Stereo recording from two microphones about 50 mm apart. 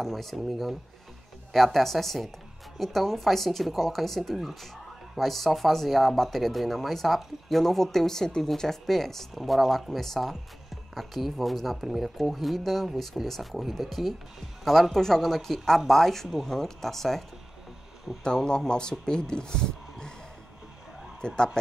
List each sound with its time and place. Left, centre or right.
0.0 s speech: centre
18.2 s speech: centre
21.2 s speech: centre